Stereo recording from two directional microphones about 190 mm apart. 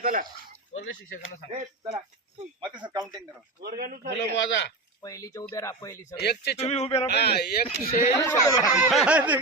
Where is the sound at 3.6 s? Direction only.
50° right (ahead or behind).